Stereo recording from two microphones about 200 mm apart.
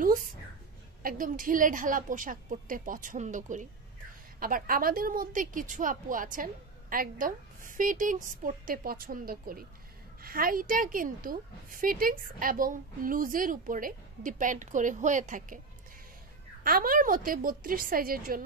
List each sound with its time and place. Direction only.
1.0 s a woman's voice: 45° right (ahead or behind)
16.6 s a woman's voice: 45° right (ahead or behind)